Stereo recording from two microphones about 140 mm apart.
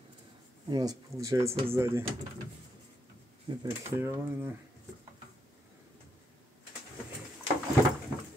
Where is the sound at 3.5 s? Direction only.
40° right (ahead or behind).